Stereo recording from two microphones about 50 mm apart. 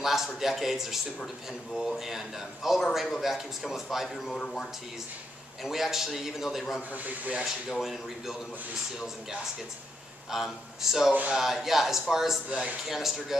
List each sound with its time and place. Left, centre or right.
0.0 s speech: centre
4.3 s speech: centre
5.6 s speech: centre
6.9 s speech: right
7.4 s speech: centre
10.3 s speech: centre
12.4 s speech: right
12.8 s speech: centre